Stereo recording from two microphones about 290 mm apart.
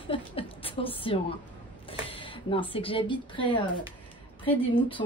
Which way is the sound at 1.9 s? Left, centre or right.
Centre.